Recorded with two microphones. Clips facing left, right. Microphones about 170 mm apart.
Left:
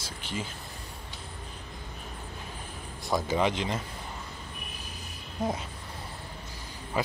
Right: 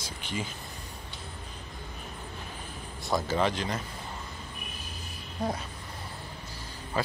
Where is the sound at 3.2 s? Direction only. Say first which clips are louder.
Left 2 dB; 15° left (ahead or behind).